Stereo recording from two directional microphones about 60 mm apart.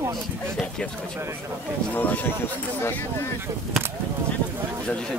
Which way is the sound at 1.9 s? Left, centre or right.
Left.